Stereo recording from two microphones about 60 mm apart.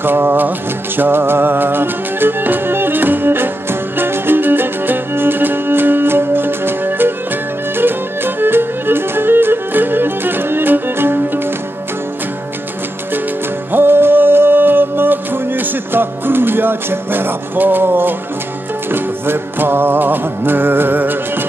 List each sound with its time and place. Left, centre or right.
0.0 s music: right
13.7 s music: right